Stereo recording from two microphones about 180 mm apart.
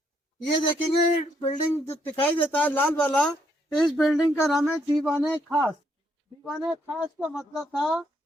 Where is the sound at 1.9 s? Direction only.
10° left (ahead or behind).